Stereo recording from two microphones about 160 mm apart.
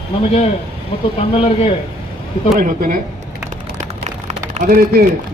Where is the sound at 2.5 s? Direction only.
60° right (ahead or behind).